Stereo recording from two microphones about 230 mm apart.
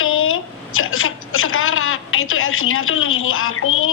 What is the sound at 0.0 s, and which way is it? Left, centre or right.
A woman's voice, left.